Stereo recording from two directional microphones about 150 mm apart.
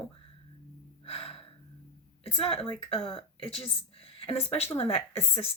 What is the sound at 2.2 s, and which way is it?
A woman's voice, 40° left (ahead or behind).